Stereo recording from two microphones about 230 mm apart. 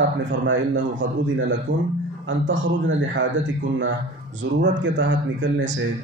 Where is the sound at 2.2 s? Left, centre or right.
Right.